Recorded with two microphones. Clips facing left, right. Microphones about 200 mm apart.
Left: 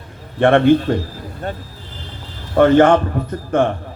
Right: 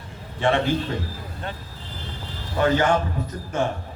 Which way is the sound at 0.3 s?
55° left (ahead or behind).